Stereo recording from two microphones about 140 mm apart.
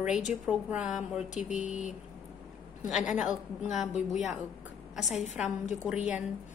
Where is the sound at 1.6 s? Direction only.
60° left (ahead or behind).